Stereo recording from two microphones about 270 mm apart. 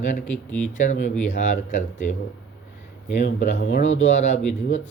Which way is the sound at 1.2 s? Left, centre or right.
Left.